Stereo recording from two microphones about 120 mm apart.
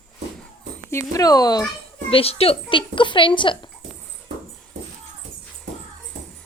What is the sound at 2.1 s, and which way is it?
A child's voice, 55° left (ahead or behind).